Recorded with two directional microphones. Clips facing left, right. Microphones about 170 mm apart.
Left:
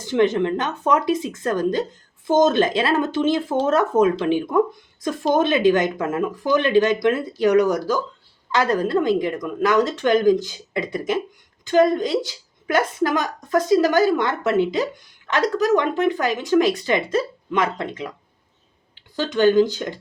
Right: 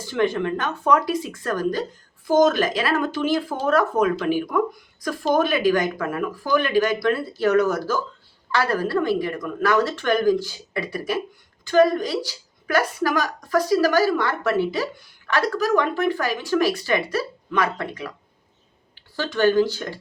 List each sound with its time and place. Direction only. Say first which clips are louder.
0.0 s a woman's voice: left 4 dB; 20° left (ahead or behind)
19.1 s a woman's voice: left 3 dB; 20° left (ahead or behind)